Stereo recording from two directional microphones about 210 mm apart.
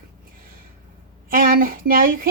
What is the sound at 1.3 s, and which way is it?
Speech, 45° right (ahead or behind).